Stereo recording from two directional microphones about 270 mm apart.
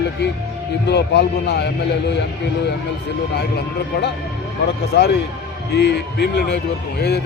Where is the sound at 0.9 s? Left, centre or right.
Left.